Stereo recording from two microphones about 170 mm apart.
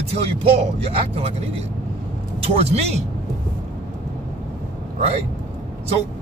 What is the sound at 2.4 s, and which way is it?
Speech, 40° right (ahead or behind).